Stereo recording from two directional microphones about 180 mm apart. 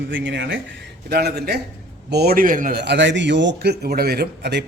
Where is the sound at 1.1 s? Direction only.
60° right (ahead or behind).